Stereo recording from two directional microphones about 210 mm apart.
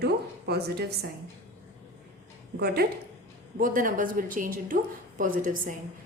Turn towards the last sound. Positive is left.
turn(degrees=-40)  # may be behind; listen again after turning